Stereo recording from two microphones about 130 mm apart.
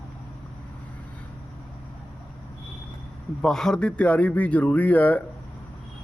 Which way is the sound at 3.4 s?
5° left (ahead or behind).